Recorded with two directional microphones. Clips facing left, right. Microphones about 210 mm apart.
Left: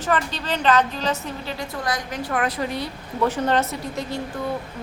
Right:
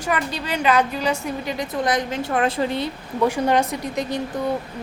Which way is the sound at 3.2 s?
10° right (ahead or behind).